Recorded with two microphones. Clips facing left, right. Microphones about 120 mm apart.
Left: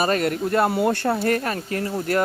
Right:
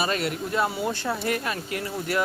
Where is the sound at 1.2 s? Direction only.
45° left (ahead or behind).